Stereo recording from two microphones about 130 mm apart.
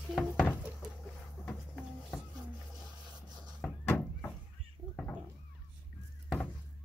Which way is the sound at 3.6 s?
10° left (ahead or behind).